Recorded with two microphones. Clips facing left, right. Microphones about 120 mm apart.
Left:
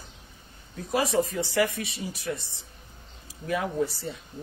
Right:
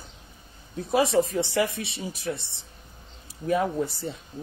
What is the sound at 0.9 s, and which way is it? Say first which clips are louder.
Speech: right 3 dB; 30° right (ahead or behind).